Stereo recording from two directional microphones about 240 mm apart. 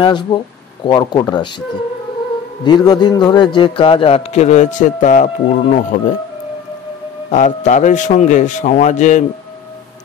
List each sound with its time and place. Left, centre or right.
0.0 s a man's voice: centre
2.6 s a man's voice: centre
7.2 s a man's voice: left